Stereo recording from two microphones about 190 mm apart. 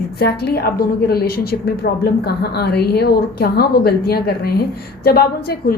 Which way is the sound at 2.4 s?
60° left (ahead or behind).